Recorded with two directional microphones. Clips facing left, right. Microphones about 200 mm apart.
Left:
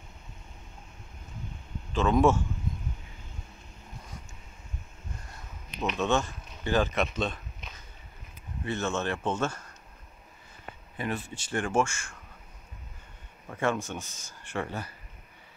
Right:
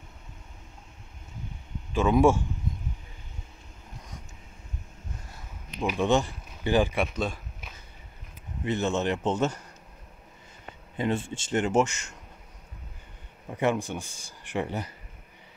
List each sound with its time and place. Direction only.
2.0 s speech: 10° right (ahead or behind)
5.8 s speech: 10° right (ahead or behind)
8.6 s speech: 20° right (ahead or behind)
11.0 s speech: 25° right (ahead or behind)
13.5 s speech: 15° right (ahead or behind)